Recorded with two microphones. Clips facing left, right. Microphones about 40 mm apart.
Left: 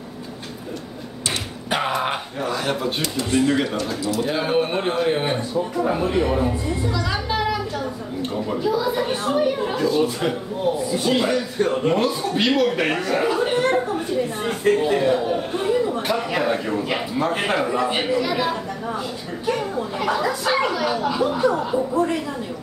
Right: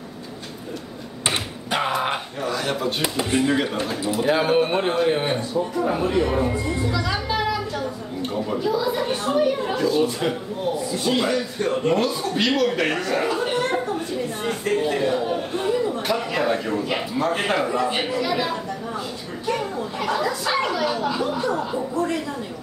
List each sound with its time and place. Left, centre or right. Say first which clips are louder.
1.7 s speech: even; centre
3.0 s speech: left 1 dB; right
4.2 s a man's voice: right 3 dB; centre
21.9 s a woman's voice: left 2 dB; centre